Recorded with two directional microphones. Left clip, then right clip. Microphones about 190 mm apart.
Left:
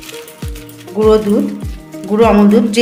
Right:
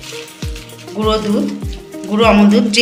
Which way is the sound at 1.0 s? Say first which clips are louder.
Left 6 dB; 50° left (ahead or behind).